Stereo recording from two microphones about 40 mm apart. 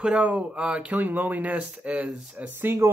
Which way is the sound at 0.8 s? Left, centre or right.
Right.